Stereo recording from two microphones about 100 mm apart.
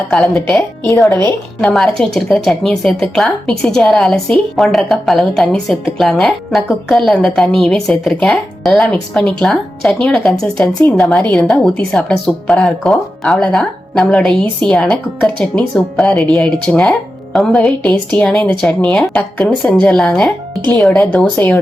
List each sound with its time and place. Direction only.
1.0 s a woman's voice: 30° left (ahead or behind)
1.6 s speech: 5° left (ahead or behind)